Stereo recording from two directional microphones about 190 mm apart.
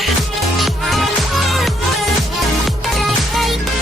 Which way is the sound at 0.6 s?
Centre (ahead or behind).